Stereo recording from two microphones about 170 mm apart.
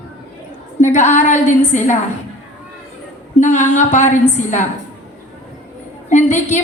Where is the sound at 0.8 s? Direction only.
45° left (ahead or behind).